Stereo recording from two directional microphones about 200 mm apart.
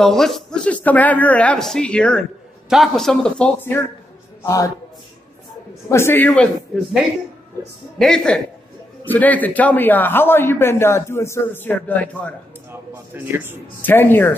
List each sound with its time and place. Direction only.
0.0 s a man's voice: centre (ahead or behind)
5.9 s speech: 10° left (ahead or behind)
12.9 s speech: 10° right (ahead or behind)
13.8 s speech: 10° left (ahead or behind)